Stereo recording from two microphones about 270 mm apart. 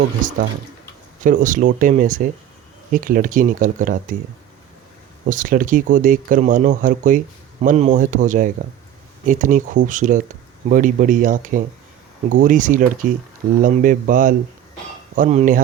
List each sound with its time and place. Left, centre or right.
1.2 s speech: right
5.2 s speech: right